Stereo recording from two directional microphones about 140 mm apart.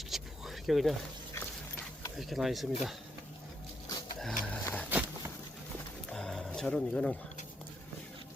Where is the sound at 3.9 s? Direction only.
30° left (ahead or behind).